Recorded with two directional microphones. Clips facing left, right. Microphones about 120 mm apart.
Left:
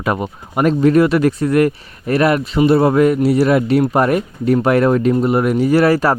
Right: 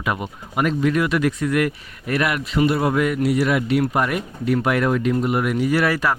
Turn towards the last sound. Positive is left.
turn(degrees=35)  # may be behind; listen again after turning